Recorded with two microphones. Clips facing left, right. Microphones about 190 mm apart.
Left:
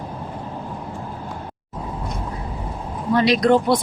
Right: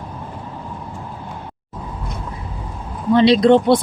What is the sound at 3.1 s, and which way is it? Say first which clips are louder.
Speech: right 4 dB; 25° right (ahead or behind).